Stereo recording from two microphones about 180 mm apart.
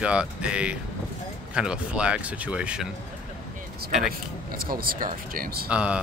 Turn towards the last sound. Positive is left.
turn(degrees=-5)  # may be behind; listen again after turning